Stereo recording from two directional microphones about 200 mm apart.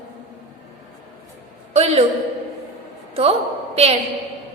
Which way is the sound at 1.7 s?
30° right (ahead or behind).